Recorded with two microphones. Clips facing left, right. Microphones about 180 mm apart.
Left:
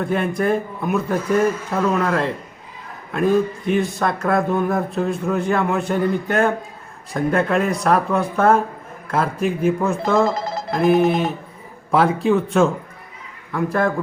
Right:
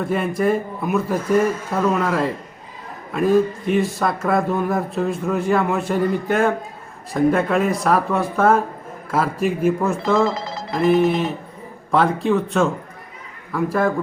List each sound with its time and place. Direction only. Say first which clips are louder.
0.0 s a man's voice: even; centre (ahead or behind)
10.2 s telephone bell ringing: left 2 dB; 50° left (ahead or behind)
10.8 s a man's voice: even; centre (ahead or behind)